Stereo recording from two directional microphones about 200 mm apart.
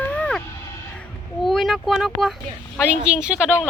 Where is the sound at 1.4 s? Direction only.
Centre (ahead or behind).